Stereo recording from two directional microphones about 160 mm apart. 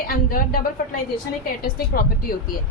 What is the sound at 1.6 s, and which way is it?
Speech, 70° left (ahead or behind).